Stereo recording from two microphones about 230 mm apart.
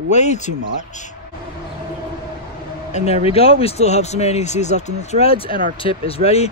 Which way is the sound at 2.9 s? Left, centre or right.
Left.